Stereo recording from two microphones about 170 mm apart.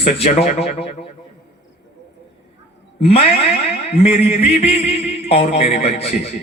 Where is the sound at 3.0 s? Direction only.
35° left (ahead or behind).